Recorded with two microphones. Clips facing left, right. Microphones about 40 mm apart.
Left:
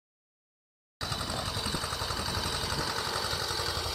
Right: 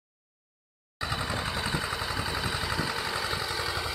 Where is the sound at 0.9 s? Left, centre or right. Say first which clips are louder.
Right 4 dB; right.